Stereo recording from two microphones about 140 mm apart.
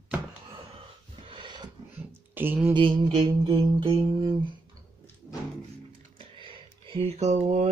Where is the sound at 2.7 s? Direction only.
35° right (ahead or behind).